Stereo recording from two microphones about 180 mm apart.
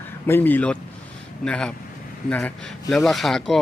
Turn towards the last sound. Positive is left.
turn(degrees=0)  # may be behind; listen again after turning